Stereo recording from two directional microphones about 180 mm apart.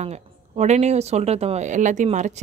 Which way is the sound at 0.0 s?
40° right (ahead or behind).